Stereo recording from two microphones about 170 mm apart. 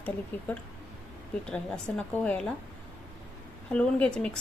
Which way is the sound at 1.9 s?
5° left (ahead or behind).